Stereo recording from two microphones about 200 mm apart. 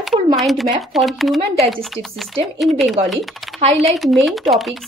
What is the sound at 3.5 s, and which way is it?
Speech, 30° right (ahead or behind).